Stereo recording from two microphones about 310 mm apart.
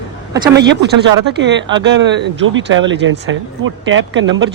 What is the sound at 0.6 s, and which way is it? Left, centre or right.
Speech, right.